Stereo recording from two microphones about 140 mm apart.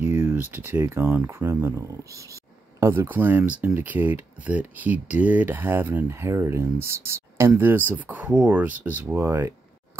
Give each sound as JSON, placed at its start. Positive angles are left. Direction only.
{"t": 0.0, "sound": "speech", "side_deg": -15}